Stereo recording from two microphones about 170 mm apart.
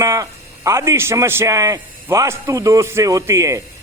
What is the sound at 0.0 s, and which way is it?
A man's voice, 20° right (ahead or behind).